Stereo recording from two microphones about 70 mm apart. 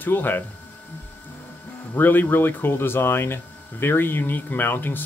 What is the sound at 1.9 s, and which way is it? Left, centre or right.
Speech, left.